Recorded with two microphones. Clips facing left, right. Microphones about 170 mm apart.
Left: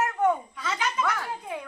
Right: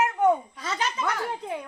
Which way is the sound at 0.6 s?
35° right (ahead or behind).